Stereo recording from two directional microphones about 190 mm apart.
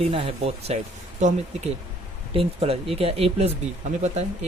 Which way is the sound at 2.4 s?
30° right (ahead or behind).